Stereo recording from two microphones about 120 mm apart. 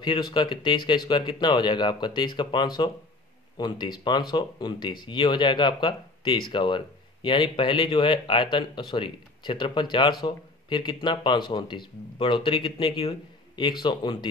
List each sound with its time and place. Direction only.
0.0 s speech: 40° left (ahead or behind)